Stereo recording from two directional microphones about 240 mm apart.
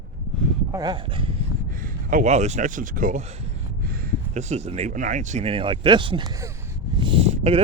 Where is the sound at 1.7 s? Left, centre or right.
Right; by 6.5 s centre.